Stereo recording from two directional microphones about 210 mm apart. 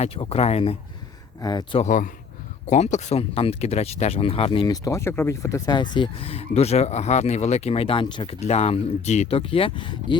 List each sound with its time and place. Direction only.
0.0 s speech: 30° left (ahead or behind)
1.8 s speech: 40° left (ahead or behind); by 10.2 s 25° left (ahead or behind)